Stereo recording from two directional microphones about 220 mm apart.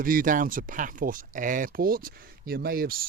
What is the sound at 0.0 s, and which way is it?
Speech, 40° right (ahead or behind).